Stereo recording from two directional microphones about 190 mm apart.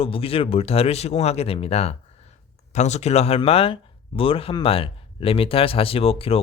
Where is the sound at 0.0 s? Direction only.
30° left (ahead or behind).